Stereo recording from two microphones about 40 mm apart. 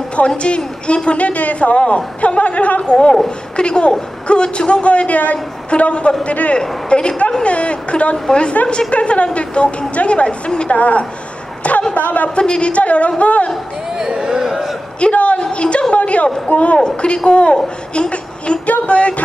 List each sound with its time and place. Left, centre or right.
0.4 s a woman's voice: left
2.8 s a woman's voice: left
10.7 s a woman's voice: left
11.9 s a sound: left
12.4 s a woman's voice: left
13.9 s a sound: centre
15.0 s a man's voice: left
16.8 s a woman's voice: left